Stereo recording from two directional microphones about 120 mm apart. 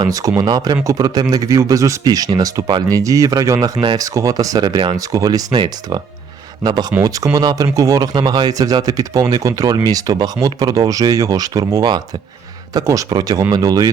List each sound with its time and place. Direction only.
0.0 s speech: 30° right (ahead or behind)